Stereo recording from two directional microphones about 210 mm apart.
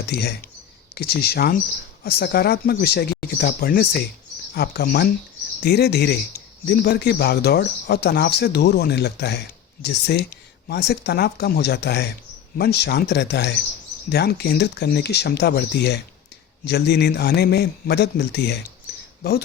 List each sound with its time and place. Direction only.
0.0 s speech: 50° left (ahead or behind)